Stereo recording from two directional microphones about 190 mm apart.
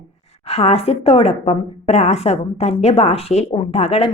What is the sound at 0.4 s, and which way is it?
Speech, 30° left (ahead or behind).